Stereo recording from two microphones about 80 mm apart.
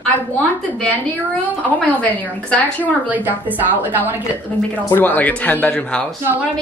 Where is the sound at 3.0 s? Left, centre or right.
Right.